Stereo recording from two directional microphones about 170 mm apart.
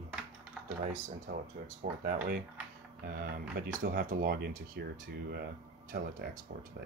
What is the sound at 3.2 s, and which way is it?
Speech, 65° right (ahead or behind).